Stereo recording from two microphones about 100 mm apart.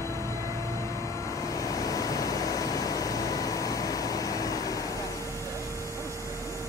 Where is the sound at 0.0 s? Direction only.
30° left (ahead or behind).